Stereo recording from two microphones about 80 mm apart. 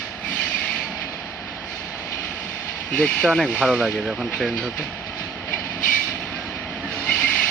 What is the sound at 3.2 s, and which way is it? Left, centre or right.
Speech, centre.